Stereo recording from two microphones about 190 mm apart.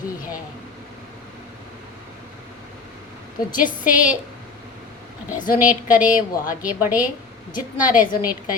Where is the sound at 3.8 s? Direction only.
10° right (ahead or behind).